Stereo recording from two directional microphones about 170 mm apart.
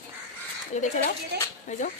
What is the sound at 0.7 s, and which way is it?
Speech, 45° left (ahead or behind).